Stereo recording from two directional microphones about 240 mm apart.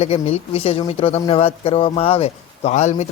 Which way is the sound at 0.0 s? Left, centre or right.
Left.